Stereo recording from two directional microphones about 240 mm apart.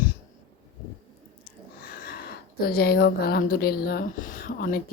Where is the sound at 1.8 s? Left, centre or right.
Left.